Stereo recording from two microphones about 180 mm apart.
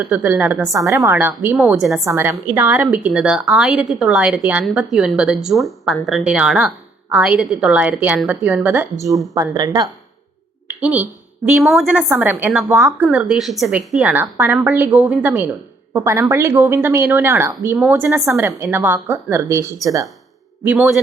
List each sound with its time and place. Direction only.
0.0 s a woman's voice: 10° right (ahead or behind)
2.0 s a woman's voice: 10° right (ahead or behind)
9.3 s speech: 20° right (ahead or behind)
10.7 s a woman's voice: 5° right (ahead or behind)